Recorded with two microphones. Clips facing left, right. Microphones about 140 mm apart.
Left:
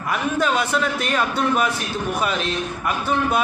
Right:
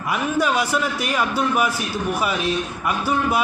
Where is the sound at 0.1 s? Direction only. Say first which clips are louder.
Even; 10° right (ahead or behind).